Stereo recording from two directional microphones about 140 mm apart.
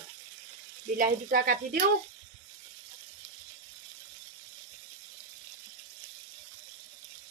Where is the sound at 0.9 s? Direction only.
85° right.